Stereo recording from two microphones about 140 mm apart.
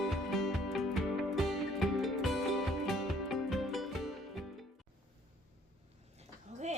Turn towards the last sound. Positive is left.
turn(degrees=-55)  # may be behind; listen again after turning